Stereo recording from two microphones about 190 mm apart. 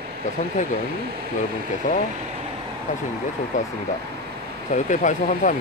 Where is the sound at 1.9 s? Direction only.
45° left (ahead or behind).